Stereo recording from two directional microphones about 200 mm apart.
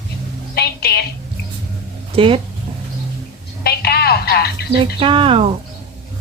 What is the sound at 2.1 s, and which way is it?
Speech, 25° right (ahead or behind).